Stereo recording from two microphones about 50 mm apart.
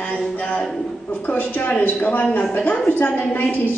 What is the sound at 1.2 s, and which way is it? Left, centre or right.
Speech, left.